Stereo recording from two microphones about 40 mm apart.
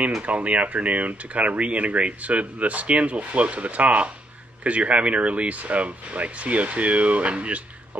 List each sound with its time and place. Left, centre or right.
0.2 s speech: right